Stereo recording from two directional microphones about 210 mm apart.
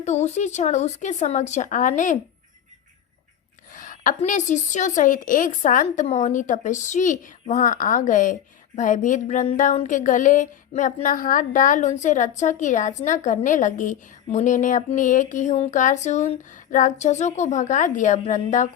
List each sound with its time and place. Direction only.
0.0 s a woman's voice: 30° left (ahead or behind)
3.8 s a woman's voice: 40° left (ahead or behind)